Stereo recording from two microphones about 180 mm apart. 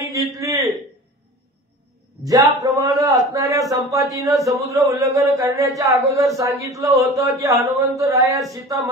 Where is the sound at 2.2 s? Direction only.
20° right (ahead or behind).